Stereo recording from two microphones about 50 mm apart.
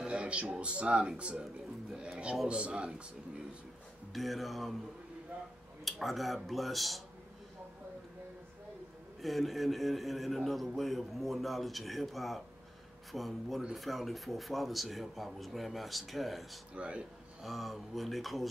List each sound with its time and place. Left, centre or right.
0.0 s speech: right
1.4 s music: centre
2.4 s speech: centre
4.1 s a man's voice: centre
5.9 s a man's voice: centre
9.2 s a man's voice: centre
16.7 s speech: right
17.4 s a man's voice: centre